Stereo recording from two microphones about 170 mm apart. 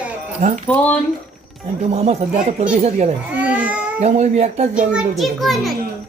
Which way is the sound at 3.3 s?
10° right (ahead or behind).